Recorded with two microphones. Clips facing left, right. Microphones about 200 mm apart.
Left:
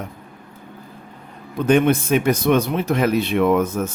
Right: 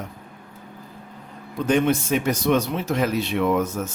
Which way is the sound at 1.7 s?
60° left (ahead or behind).